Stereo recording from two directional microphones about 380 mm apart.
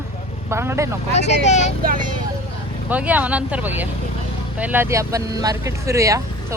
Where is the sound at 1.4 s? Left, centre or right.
Centre.